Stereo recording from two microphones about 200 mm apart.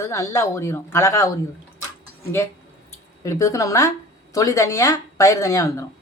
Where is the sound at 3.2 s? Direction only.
15° left (ahead or behind).